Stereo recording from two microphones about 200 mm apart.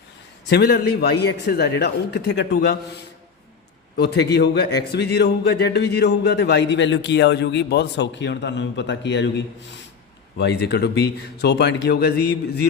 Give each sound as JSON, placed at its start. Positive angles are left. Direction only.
{"t": 0.5, "sound": "a man's voice", "side_deg": 50}
{"t": 3.9, "sound": "a man's voice", "side_deg": 55}